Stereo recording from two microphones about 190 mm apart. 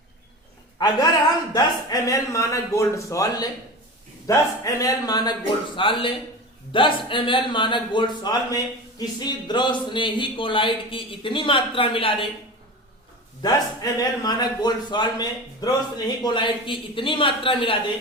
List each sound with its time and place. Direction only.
0.8 s a man's voice: 20° left (ahead or behind)
13.4 s a man's voice: 20° left (ahead or behind)